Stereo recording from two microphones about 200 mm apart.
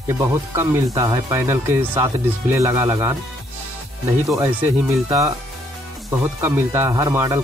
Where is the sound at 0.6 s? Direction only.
20° right (ahead or behind).